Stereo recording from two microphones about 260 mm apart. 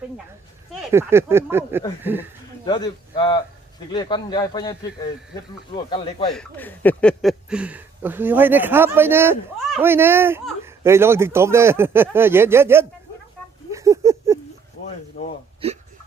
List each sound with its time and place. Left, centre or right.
0.7 s speech: centre
2.6 s a man's voice: centre
6.3 s speech: centre
13.7 s a sound: centre
15.2 s speech: left
15.6 s speech: right